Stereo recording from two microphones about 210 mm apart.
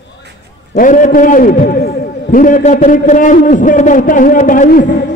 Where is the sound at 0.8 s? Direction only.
40° left (ahead or behind).